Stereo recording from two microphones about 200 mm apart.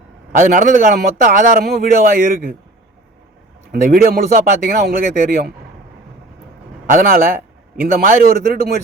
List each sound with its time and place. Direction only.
0.3 s a man's voice: 40° right (ahead or behind)
3.7 s a man's voice: 50° right (ahead or behind)
6.9 s a man's voice: 45° right (ahead or behind)